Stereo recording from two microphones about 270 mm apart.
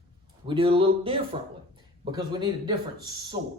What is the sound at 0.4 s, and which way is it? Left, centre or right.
Speech, centre.